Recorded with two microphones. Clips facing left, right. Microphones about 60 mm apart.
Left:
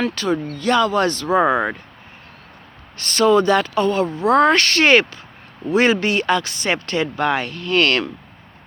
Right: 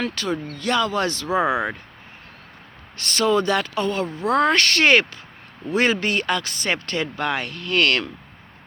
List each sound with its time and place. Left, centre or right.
0.0 s speech: left
3.0 s speech: left
5.7 s speech: left